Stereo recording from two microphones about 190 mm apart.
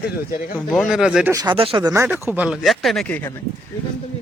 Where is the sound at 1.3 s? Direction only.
25° right (ahead or behind); by 3.3 s 10° left (ahead or behind).